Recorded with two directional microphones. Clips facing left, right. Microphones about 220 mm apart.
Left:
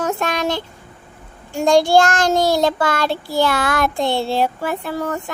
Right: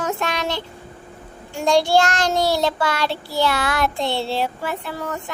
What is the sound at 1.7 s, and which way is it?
Child singing, 50° left (ahead or behind).